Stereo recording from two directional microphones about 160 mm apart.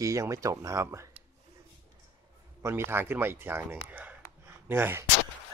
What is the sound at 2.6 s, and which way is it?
Speech, 15° right (ahead or behind).